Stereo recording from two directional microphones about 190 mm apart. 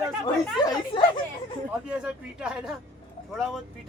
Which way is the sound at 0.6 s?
25° left (ahead or behind).